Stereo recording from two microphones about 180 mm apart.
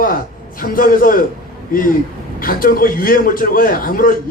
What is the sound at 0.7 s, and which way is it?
Speech, 50° left (ahead or behind).